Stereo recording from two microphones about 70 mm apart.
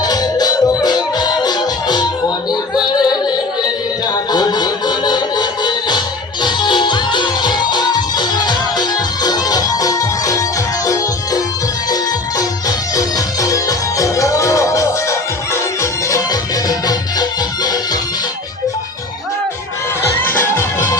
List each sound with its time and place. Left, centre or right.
0.0 s music: left
3.0 s music: left
16.3 s music: left
20.1 s music: left